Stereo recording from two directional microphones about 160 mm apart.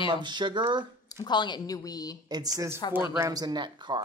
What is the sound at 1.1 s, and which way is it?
A woman's voice, 25° left (ahead or behind).